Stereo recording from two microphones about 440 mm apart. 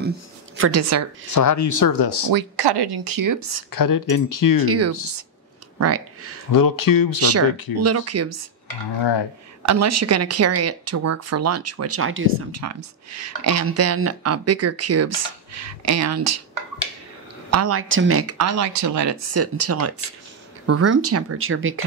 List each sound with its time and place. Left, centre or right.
0.6 s speech: right
1.3 s speech: left
2.3 s speech: right
3.7 s speech: left
4.6 s speech: right
6.5 s speech: left
7.7 s speech: right
9.7 s speech: right
17.5 s speech: right